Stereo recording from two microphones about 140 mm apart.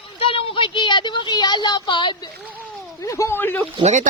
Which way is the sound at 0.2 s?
40° left (ahead or behind).